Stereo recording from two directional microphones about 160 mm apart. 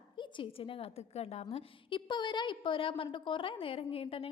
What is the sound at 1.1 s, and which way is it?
A woman's voice, 40° left (ahead or behind).